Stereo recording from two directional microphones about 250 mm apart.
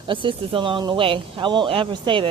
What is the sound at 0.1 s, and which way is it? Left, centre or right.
Speech, centre.